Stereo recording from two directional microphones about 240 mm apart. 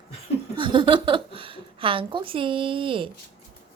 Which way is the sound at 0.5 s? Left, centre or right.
Centre.